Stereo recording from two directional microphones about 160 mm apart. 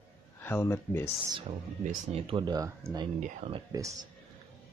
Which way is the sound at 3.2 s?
40° right (ahead or behind).